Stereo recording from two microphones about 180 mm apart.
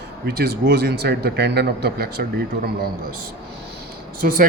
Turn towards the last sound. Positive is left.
turn(degrees=-50)  # may be behind; listen again after turning